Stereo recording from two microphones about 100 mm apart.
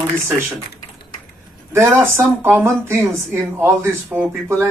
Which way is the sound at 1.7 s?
25° right (ahead or behind).